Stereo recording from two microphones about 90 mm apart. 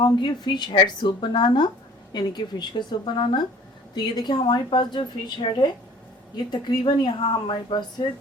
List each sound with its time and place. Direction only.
0.0 s a woman's voice: 60° left (ahead or behind)
7.5 s a woman's voice: 55° left (ahead or behind)